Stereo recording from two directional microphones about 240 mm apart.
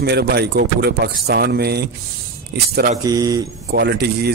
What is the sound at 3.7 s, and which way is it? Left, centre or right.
Speech, right.